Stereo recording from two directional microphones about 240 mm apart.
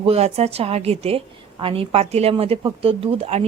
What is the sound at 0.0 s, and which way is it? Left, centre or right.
A woman's voice, right.